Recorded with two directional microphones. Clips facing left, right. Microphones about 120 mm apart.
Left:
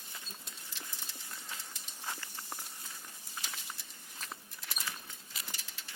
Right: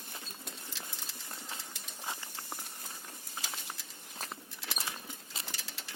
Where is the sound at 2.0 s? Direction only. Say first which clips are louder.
Right 1 dB; 15° right (ahead or behind).